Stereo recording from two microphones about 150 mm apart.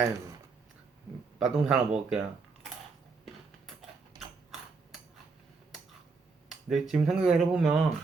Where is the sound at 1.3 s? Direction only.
5° right (ahead or behind).